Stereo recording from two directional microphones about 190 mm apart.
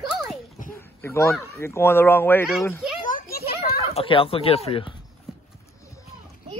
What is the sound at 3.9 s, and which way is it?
Speech, 30° left (ahead or behind).